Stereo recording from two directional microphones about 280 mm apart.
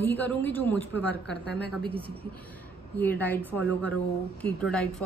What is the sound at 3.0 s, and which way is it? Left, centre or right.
A woman's voice, centre.